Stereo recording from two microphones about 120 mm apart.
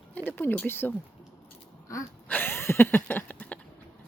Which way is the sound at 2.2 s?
15° left (ahead or behind).